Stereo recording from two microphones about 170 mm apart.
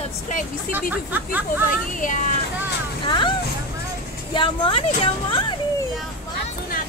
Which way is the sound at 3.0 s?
30° left (ahead or behind).